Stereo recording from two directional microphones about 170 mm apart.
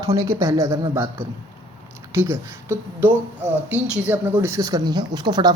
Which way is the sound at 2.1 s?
15° right (ahead or behind).